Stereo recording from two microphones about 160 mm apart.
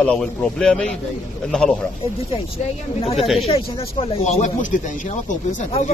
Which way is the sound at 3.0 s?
40° left (ahead or behind).